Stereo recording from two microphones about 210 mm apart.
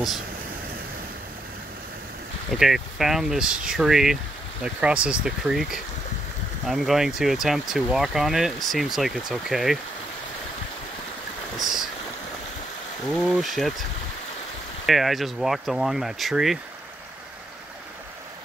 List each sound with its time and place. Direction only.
2.5 s speech: centre (ahead or behind)
11.5 s boat: centre (ahead or behind)
13.1 s speech: centre (ahead or behind)
14.9 s speech: centre (ahead or behind)